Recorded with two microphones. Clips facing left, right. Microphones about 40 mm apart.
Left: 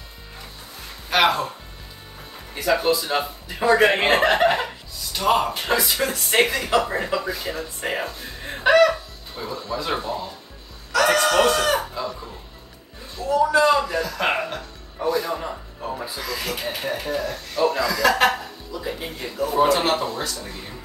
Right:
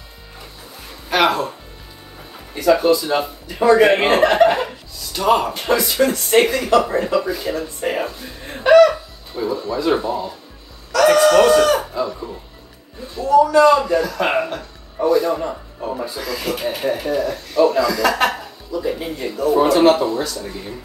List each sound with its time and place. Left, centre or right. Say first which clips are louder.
1.1 s speech: right 2 dB; centre
2.5 s speech: right 6 dB; centre
8.6 s a sound: right 6 dB; centre
9.3 s speech: right 7 dB; centre
13.6 s speech: right 6 dB; centre